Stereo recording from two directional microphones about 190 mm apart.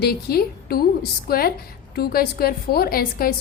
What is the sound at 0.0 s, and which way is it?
A woman's voice, 55° left (ahead or behind).